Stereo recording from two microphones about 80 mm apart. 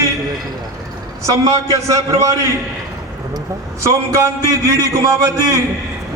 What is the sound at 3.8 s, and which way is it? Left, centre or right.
A man's voice, right.